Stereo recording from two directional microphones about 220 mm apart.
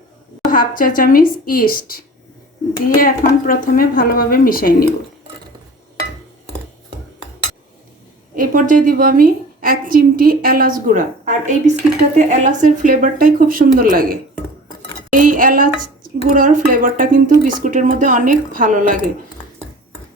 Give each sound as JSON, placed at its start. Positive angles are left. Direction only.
{"t": 0.5, "sound": "a woman's voice", "side_deg": 40}
{"t": 3.0, "sound": "a woman's voice", "side_deg": 40}
{"t": 8.4, "sound": "a woman's voice", "side_deg": -40}